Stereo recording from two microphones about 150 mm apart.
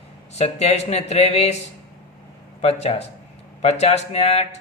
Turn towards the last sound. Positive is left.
turn(degrees=45)  # may be behind; listen again after turning